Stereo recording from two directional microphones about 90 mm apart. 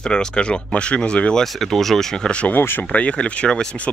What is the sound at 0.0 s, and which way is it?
Speech, 10° left (ahead or behind).